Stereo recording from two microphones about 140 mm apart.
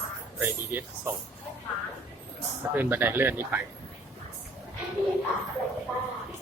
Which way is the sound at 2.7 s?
15° right (ahead or behind).